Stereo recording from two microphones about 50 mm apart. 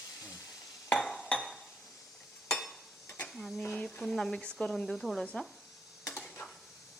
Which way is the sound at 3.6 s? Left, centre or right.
Centre.